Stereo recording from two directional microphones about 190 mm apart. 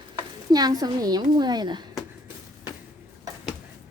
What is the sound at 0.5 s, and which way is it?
A woman's voice, 20° right (ahead or behind).